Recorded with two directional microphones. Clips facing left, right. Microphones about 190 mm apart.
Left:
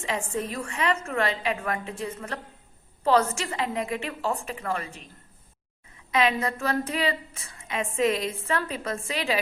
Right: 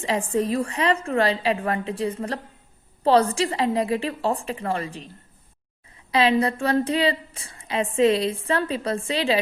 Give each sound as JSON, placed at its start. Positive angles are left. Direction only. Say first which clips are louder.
{"t": 0.0, "sound": "a woman's voice", "louder": "right 6 dB", "side_deg": -35}
{"t": 6.1, "sound": "a woman's voice", "louder": "right 5 dB", "side_deg": -30}